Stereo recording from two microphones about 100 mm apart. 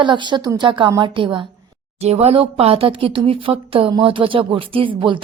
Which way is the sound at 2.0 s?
90° right.